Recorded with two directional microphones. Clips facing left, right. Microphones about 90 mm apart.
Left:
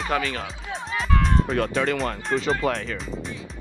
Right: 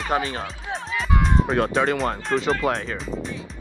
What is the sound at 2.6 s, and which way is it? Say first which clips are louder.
Speech: right 1 dB; 20° right (ahead or behind).